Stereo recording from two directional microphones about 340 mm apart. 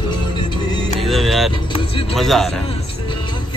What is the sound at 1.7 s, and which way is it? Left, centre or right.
Vehicle, centre.